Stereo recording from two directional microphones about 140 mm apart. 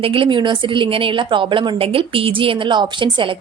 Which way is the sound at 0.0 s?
40° right (ahead or behind).